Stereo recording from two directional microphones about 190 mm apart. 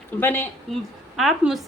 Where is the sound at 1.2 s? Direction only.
Centre (ahead or behind).